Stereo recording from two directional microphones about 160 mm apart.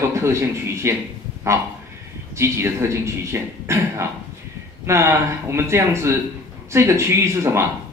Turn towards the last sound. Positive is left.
turn(degrees=-15)  # may be behind; listen again after turning